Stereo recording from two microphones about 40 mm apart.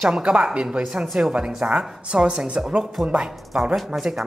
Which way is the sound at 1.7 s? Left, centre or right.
Right.